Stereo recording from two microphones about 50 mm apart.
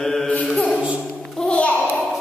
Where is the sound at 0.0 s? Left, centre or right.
Centre.